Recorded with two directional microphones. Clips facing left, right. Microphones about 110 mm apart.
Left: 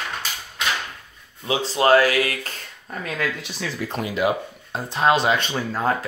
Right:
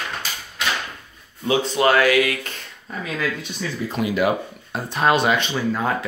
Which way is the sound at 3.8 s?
70° left (ahead or behind).